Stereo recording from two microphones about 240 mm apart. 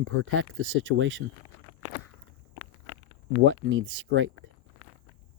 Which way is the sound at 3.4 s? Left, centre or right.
Right.